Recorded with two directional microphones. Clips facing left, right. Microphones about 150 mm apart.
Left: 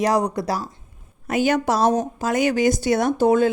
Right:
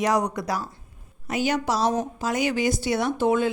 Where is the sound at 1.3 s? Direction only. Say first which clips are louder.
Left 5 dB; 50° left (ahead or behind).